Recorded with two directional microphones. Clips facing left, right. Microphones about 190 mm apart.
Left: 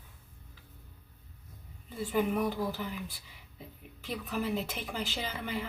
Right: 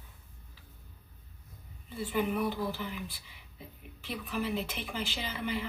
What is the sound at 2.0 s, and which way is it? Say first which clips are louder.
A woman's voice: left 1 dB; 40° left (ahead or behind).